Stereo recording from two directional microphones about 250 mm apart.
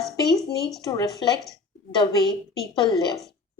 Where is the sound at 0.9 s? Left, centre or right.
Centre.